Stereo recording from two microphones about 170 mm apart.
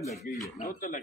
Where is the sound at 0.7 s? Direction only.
55° left (ahead or behind).